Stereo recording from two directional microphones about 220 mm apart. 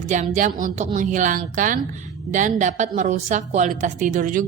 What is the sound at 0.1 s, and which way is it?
A woman's voice, 35° right (ahead or behind).